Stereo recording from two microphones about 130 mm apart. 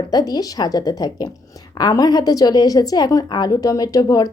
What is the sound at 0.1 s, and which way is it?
A woman's voice, 30° left (ahead or behind).